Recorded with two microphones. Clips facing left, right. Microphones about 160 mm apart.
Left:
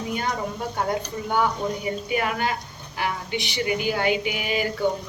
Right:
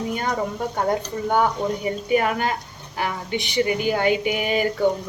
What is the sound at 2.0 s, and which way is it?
Speech, 40° right (ahead or behind).